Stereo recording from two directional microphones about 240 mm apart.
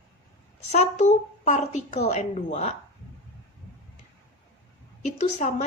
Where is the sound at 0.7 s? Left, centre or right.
Left.